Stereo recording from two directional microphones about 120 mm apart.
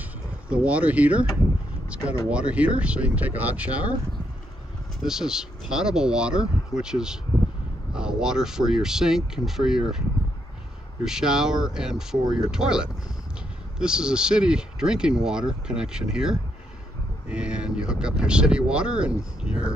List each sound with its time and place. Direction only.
0.5 s speech: 10° right (ahead or behind)
5.0 s speech: 5° right (ahead or behind)
11.1 s speech: 5° right (ahead or behind)